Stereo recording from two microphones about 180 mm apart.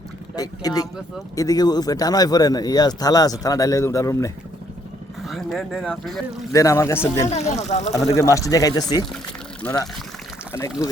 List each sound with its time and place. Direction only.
0.3 s a man's voice: 20° left (ahead or behind)
5.2 s speech: centre (ahead or behind)
6.5 s speech: 15° left (ahead or behind)
7.3 s speech: 40° left (ahead or behind)
7.9 s speech: 15° left (ahead or behind)
9.6 s speech: 10° left (ahead or behind)
10.5 s speech: 20° left (ahead or behind)